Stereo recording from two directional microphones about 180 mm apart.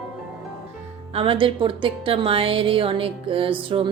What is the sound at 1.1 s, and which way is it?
A woman's voice, 30° right (ahead or behind).